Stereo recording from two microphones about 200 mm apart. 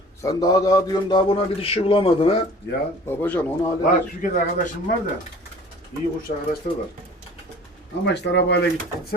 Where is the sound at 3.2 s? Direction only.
10° left (ahead or behind).